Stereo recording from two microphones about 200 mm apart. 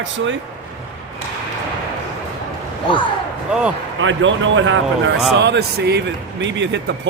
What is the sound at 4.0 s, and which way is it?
Speech, 70° right (ahead or behind).